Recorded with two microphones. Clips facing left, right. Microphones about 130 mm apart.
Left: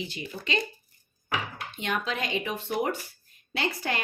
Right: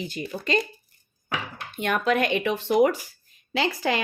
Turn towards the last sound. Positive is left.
turn(degrees=-90)